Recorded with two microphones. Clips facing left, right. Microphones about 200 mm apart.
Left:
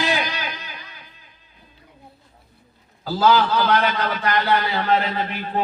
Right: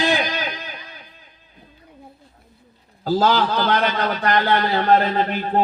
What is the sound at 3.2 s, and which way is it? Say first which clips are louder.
A man's voice: left 2 dB; 45° right (ahead or behind).